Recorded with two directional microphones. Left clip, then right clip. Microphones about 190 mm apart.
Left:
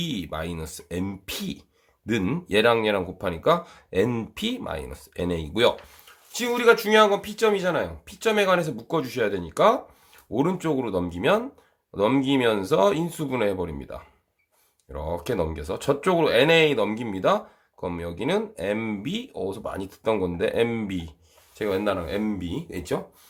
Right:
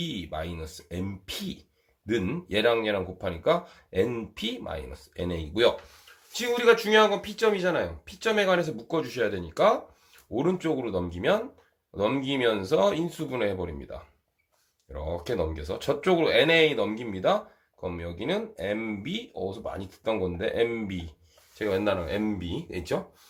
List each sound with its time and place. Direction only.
0.0 s speech: 35° left (ahead or behind)
21.6 s speech: 20° left (ahead or behind)